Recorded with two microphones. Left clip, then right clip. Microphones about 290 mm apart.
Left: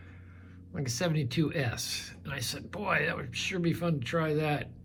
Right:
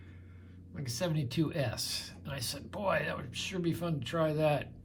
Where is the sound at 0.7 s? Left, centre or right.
Centre.